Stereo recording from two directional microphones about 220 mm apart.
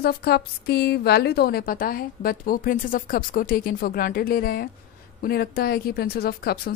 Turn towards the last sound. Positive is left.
turn(degrees=45)  # may be behind; listen again after turning